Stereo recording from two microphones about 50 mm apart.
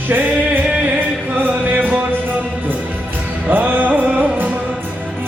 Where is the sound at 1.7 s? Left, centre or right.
Right.